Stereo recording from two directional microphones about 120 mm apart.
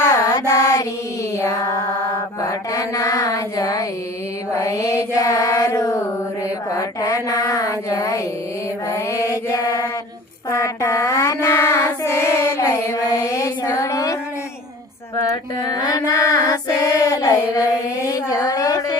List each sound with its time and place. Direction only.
0.0 s mantra: 25° left (ahead or behind)
5.1 s female singing: 25° left (ahead or behind)
6.7 s speech: 30° left (ahead or behind)
8.9 s mantra: 25° left (ahead or behind)
10.5 s child singing: 25° left (ahead or behind)
15.1 s female singing: 30° left (ahead or behind)
18.0 s a sound: 25° left (ahead or behind)